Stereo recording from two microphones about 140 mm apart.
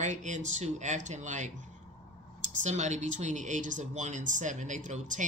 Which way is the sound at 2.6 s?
55° right (ahead or behind).